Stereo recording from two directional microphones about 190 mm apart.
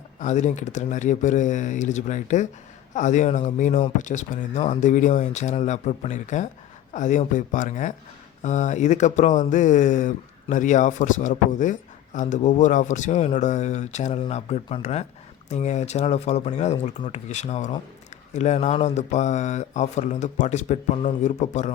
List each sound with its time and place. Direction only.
0.2 s speech: 40° left (ahead or behind)